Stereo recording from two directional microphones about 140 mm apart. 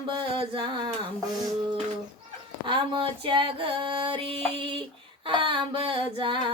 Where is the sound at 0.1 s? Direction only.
35° right (ahead or behind).